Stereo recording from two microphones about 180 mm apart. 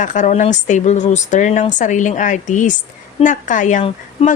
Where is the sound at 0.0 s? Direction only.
45° left (ahead or behind).